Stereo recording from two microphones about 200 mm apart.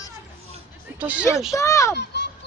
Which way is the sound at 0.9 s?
5° right (ahead or behind).